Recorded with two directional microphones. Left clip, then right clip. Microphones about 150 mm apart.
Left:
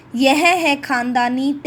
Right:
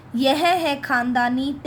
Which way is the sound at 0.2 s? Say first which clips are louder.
Left 4 dB; 20° left (ahead or behind).